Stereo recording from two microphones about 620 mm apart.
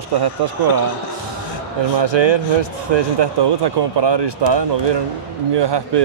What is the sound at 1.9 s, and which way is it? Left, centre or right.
Speech, right.